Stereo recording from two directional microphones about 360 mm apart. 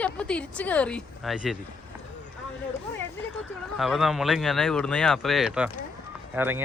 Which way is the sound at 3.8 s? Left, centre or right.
Centre.